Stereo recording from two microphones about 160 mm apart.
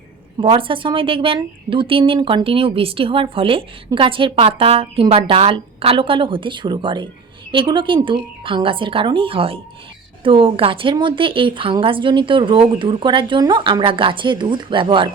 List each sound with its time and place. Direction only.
0.3 s a woman's voice: 35° right (ahead or behind)